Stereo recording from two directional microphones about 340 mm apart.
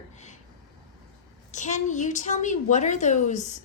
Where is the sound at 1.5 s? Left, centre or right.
Left.